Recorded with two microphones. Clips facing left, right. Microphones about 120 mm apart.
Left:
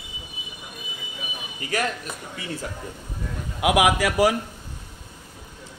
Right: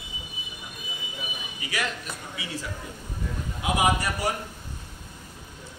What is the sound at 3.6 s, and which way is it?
Speech, 85° left.